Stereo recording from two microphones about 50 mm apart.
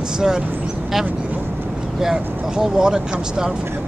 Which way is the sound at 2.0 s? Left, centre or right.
Centre.